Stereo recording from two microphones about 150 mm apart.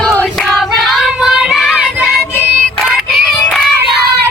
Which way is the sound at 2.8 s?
Centre (ahead or behind).